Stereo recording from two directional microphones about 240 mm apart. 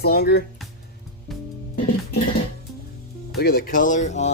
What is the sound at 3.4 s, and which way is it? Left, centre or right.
Speech, left.